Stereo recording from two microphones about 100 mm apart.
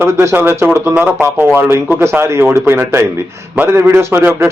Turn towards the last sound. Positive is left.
turn(degrees=-20)  # may be behind; listen again after turning